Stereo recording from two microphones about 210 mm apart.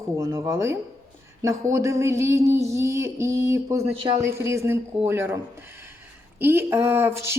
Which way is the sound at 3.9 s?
25° right (ahead or behind).